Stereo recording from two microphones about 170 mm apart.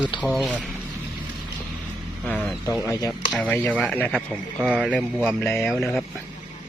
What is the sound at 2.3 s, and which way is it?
Speech, 5° left (ahead or behind).